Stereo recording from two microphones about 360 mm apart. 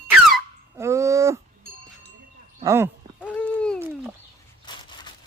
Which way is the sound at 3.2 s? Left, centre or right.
Centre.